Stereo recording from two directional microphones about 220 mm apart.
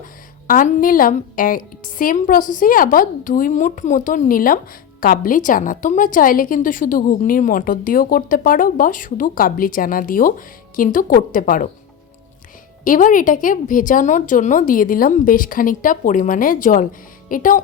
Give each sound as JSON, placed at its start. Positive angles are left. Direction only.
{"t": 0.4, "sound": "a woman's voice", "side_deg": 40}
{"t": 12.8, "sound": "a woman's voice", "side_deg": 40}